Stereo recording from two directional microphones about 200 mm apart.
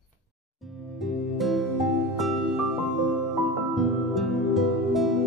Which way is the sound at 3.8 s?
Centre (ahead or behind).